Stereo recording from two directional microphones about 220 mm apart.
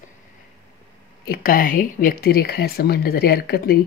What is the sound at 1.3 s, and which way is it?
Speech, 40° left (ahead or behind).